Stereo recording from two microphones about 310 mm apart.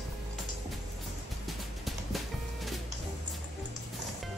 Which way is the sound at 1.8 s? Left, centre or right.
Centre.